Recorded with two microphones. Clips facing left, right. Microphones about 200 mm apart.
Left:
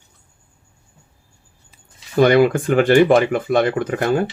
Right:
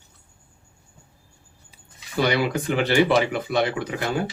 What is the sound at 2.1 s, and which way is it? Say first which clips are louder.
Speech: left 9 dB; 50° left (ahead or behind).